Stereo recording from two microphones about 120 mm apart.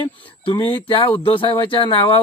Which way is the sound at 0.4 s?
45° left (ahead or behind).